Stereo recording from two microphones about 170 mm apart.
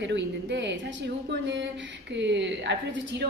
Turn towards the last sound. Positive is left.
turn(degrees=-90)